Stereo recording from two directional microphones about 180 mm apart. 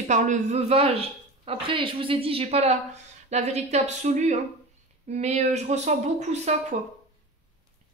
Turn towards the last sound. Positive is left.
turn(degrees=-40)  # may be behind; listen again after turning